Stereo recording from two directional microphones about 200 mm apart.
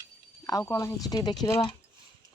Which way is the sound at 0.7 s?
15° left (ahead or behind).